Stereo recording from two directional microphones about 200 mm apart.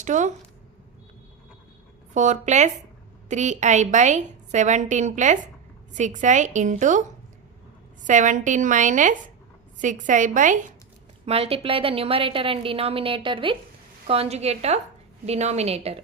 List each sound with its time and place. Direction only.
0.0 s a woman's voice: 35° right (ahead or behind)
2.1 s a woman's voice: 35° right (ahead or behind)
8.0 s a woman's voice: 40° right (ahead or behind)
11.3 s a woman's voice: 30° right (ahead or behind)